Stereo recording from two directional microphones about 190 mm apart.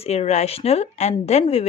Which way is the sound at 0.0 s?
35° left (ahead or behind).